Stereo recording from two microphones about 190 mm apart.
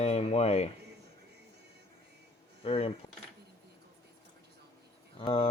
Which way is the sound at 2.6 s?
30° left (ahead or behind).